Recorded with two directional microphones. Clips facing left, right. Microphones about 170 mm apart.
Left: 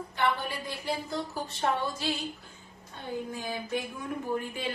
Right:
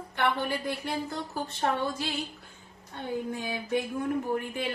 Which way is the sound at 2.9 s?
65° right (ahead or behind).